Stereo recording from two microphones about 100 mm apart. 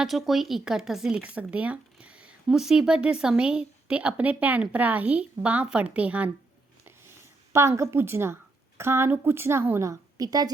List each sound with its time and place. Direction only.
0.0 s speech: centre (ahead or behind)
7.5 s a woman's voice: 25° right (ahead or behind)